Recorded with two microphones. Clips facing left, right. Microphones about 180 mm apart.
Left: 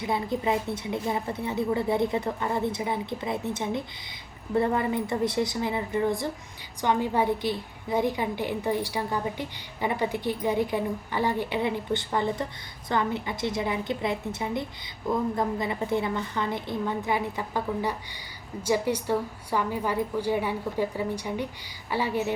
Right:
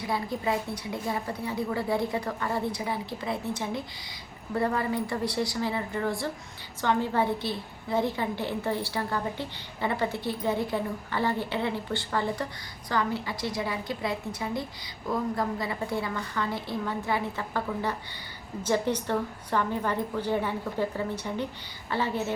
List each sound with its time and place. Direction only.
0.0 s a woman's voice: 20° left (ahead or behind)